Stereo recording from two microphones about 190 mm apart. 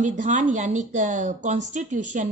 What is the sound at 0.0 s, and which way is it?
A woman's voice, 40° right (ahead or behind).